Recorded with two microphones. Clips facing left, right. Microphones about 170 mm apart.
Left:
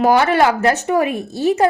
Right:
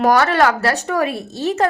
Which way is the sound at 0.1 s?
15° left (ahead or behind).